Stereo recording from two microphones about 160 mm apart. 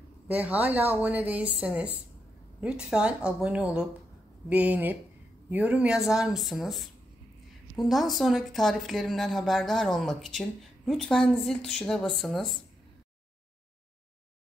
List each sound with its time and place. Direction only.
0.3 s a woman's voice: 10° right (ahead or behind)